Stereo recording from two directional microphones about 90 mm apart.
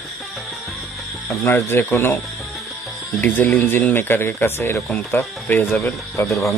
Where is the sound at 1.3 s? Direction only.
30° left (ahead or behind).